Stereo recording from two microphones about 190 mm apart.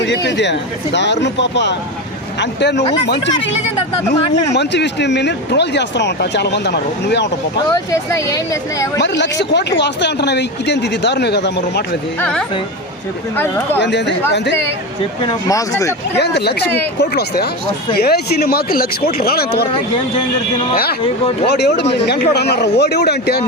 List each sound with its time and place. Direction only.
0.0 s speech: 65° left (ahead or behind)
4.5 s speech: 65° left (ahead or behind)
7.7 s speech: 15° left (ahead or behind)
9.0 s speech: 65° left (ahead or behind)
12.2 s speech: 5° left (ahead or behind)
13.7 s speech: 65° left (ahead or behind)
15.2 s speech: 20° left (ahead or behind)
16.1 s speech: 60° left (ahead or behind)
21.4 s speech: 60° left (ahead or behind)